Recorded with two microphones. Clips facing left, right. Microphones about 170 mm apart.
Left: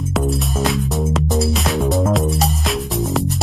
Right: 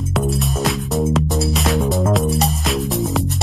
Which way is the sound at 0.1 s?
Centre (ahead or behind).